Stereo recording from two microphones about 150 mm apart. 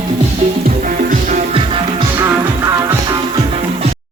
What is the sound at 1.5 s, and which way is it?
Music, 35° right (ahead or behind).